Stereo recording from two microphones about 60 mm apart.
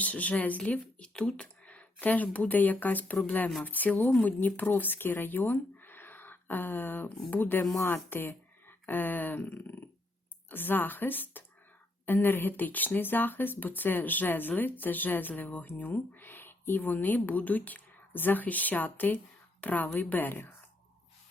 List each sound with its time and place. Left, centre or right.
0.0 s a woman's voice: left